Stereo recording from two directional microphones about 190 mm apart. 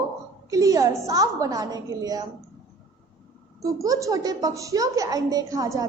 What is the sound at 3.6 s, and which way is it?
A woman's voice, 15° right (ahead or behind).